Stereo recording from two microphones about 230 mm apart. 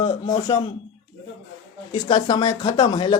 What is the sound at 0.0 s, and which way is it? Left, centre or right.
Speech, left.